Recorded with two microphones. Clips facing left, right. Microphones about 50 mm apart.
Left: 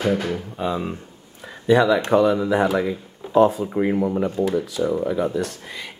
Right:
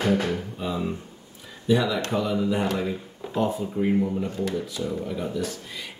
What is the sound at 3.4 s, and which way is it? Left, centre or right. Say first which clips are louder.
Speech: left 8 dB; left.